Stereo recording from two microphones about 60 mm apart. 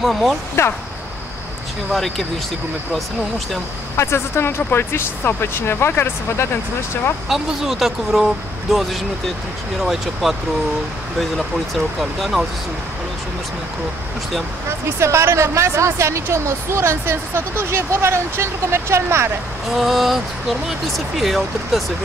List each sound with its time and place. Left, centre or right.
0.0 s speech: centre
1.9 s speech: centre
3.9 s speech: left
7.2 s speech: centre
14.9 s speech: right
19.7 s speech: centre
21.2 s speech: centre